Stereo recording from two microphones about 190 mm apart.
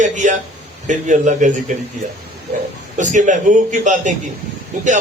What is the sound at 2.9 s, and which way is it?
A man's voice, 40° right (ahead or behind).